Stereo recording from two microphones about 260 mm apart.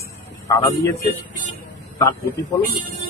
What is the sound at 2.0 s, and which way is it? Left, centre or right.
Speech, centre.